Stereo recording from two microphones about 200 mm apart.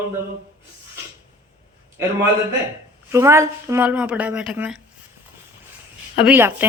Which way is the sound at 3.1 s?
15° right (ahead or behind).